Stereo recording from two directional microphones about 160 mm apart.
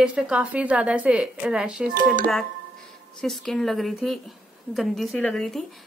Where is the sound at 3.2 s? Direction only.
Centre (ahead or behind).